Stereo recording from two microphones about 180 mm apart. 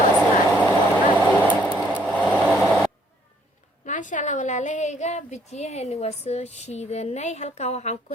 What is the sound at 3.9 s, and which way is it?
A woman's voice, 45° left (ahead or behind).